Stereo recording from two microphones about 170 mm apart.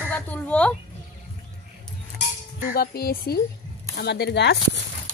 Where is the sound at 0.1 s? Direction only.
10° left (ahead or behind).